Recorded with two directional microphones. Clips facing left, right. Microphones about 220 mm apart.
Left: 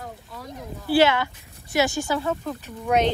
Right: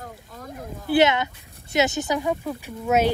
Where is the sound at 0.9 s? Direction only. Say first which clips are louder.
Even; 20° right (ahead or behind).